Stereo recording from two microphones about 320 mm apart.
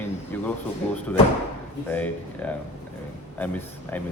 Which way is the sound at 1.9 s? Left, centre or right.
Centre.